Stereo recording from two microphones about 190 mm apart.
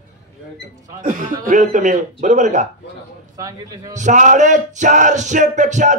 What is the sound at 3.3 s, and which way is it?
Speech, 20° right (ahead or behind).